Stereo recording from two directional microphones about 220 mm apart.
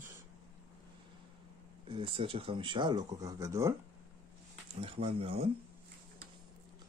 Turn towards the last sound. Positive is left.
turn(degrees=-25)  # may be behind; listen again after turning